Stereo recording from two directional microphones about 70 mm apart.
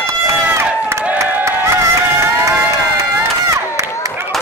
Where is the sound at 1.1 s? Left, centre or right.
Right.